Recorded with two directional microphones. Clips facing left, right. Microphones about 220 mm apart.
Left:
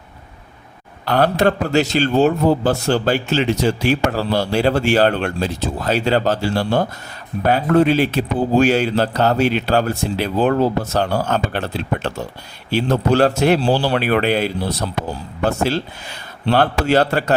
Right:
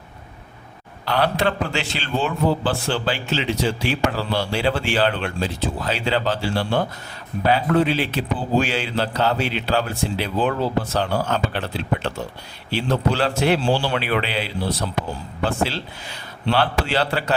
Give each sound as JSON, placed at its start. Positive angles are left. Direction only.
{"t": 1.0, "sound": "a man's voice", "side_deg": 45}